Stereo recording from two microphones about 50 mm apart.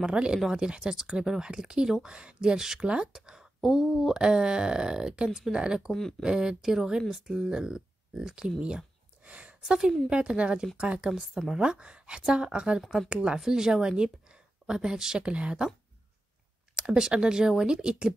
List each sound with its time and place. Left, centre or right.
0.0 s a woman's voice: centre
4.2 s speech: centre
5.9 s speech: centre
6.2 s speech: centre
9.2 s a sound: right
9.6 s a woman's voice: centre
11.1 s speech: centre
11.5 s a woman's voice: centre
16.7 s speech: centre